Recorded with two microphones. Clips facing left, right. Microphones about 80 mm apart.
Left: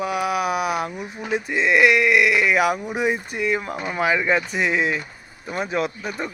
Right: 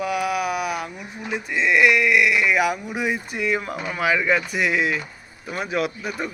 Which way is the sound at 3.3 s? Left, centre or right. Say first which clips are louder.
Left 1 dB; centre.